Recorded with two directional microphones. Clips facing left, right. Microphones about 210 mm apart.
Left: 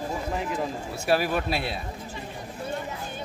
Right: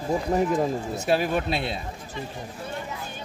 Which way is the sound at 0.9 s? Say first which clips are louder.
Left 1 dB; 20° right (ahead or behind).